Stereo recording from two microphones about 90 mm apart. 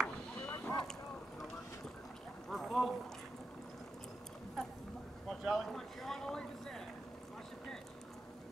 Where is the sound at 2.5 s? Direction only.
Centre (ahead or behind).